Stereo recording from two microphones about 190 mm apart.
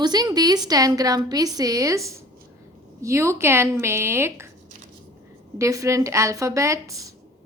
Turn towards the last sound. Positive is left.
turn(degrees=-15)  # may be behind; listen again after turning